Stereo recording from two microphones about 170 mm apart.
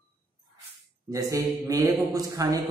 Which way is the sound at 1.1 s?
20° right (ahead or behind).